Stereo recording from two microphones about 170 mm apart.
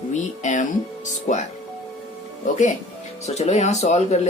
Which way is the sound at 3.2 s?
40° left (ahead or behind).